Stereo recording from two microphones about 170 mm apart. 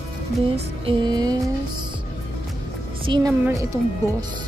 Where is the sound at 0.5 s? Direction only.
30° right (ahead or behind).